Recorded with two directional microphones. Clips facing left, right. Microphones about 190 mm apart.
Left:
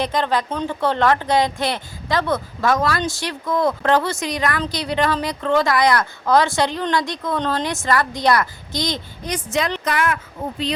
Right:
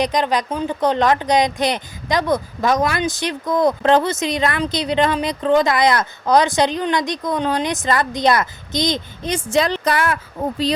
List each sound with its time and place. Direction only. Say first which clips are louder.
0.0 s a woman's voice: right 2 dB; 15° right (ahead or behind); by 10.2 s 35° right (ahead or behind)